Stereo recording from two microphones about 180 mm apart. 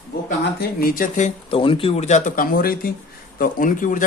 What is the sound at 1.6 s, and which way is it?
Speech, 30° left (ahead or behind).